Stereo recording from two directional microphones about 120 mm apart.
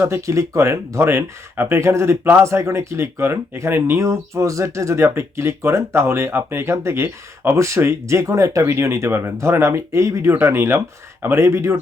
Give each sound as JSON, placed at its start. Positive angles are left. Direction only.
{"t": 0.0, "sound": "speech", "side_deg": -25}